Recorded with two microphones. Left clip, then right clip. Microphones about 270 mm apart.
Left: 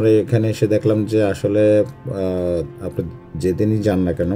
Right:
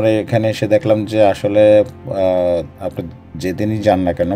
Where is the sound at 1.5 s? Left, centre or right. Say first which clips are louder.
Right 3 dB; centre.